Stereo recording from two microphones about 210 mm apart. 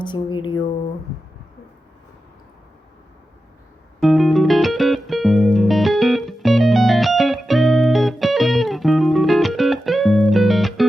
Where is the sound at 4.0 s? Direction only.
Centre (ahead or behind).